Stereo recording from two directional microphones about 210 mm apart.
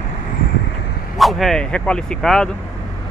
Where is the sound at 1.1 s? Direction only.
Centre (ahead or behind).